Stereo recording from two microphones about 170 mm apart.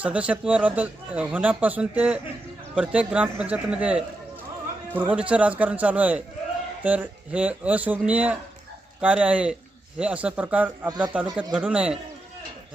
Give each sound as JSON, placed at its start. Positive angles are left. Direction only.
{"t": 0.0, "sound": "speech", "side_deg": -5}
{"t": 10.8, "sound": "speech", "side_deg": -25}
{"t": 11.3, "sound": "speech", "side_deg": -5}